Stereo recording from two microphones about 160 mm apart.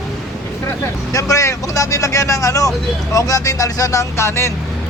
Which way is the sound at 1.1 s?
20° left (ahead or behind).